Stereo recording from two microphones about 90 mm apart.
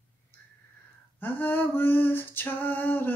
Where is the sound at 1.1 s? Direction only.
20° left (ahead or behind).